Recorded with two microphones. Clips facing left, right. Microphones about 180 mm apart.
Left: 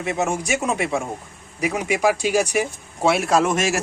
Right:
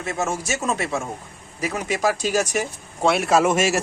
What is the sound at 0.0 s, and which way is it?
Speech, 20° left (ahead or behind).